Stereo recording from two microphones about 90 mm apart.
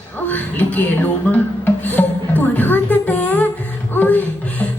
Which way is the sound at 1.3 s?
20° left (ahead or behind).